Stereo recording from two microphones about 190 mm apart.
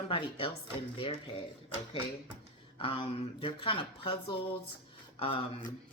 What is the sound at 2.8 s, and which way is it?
Speech, 30° left (ahead or behind).